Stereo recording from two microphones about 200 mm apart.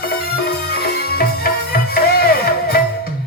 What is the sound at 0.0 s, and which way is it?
Music, 50° left (ahead or behind).